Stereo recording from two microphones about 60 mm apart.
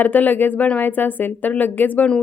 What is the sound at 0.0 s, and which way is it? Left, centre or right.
Speech, left.